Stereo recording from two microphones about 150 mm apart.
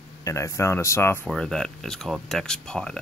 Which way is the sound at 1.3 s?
5° left (ahead or behind).